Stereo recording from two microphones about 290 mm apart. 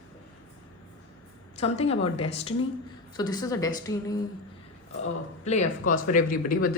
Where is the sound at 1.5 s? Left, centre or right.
Left.